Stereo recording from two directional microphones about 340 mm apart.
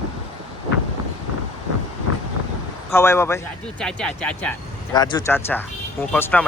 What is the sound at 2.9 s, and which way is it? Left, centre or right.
Speech, centre.